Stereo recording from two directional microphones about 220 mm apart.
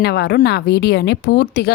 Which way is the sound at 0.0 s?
45° left (ahead or behind).